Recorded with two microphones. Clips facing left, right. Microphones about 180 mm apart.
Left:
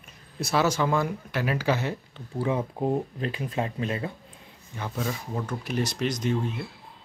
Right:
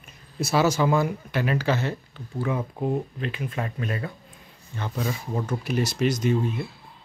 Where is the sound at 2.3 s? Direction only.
25° left (ahead or behind).